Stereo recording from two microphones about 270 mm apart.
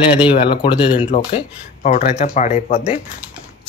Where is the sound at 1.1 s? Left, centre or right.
Left.